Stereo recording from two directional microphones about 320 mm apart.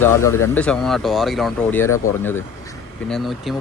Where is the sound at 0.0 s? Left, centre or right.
Centre.